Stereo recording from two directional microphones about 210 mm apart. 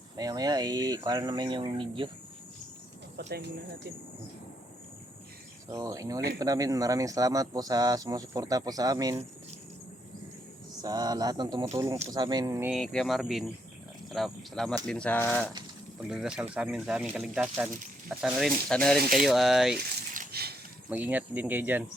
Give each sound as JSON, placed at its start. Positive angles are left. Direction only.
{"t": 0.2, "sound": "speech", "side_deg": -20}
{"t": 3.2, "sound": "speech", "side_deg": -55}
{"t": 5.7, "sound": "speech", "side_deg": -15}
{"t": 10.8, "sound": "speech", "side_deg": -20}
{"t": 12.7, "sound": "speech", "side_deg": 0}
{"t": 19.7, "sound": "a sound", "side_deg": -50}
{"t": 20.9, "sound": "speech", "side_deg": -10}